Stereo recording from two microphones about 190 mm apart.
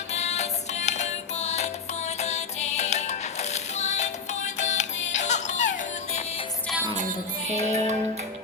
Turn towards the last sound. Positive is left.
turn(degrees=-35)  # may be behind; listen again after turning